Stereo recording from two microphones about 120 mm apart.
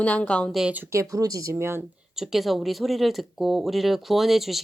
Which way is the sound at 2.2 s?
5° right (ahead or behind).